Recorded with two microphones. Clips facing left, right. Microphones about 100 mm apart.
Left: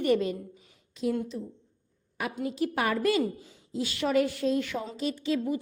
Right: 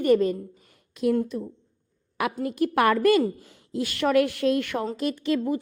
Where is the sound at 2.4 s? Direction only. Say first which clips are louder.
Right 7 dB; 55° right (ahead or behind).